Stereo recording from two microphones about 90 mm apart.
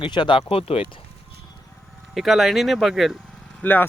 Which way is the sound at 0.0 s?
65° left (ahead or behind).